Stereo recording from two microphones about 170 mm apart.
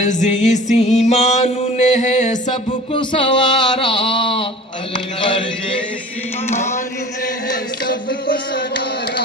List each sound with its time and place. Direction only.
0.0 s music: 45° left (ahead or behind)
6.5 s speech: 45° left (ahead or behind)
7.9 s a sound: 60° left (ahead or behind)